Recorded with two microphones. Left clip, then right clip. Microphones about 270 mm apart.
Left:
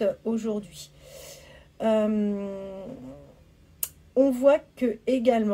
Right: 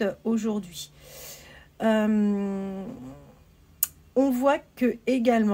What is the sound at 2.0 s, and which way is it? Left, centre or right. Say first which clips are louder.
Speech: right 1 dB; right.